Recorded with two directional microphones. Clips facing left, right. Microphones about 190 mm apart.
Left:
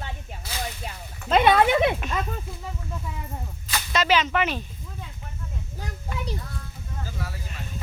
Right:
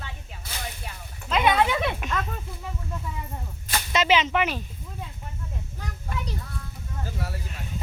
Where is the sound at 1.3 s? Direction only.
50° left (ahead or behind).